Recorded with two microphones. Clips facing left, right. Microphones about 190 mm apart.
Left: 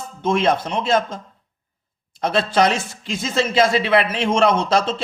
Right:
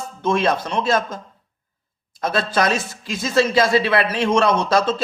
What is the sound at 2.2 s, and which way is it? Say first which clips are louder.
Speech: left 2 dB; 25° left (ahead or behind).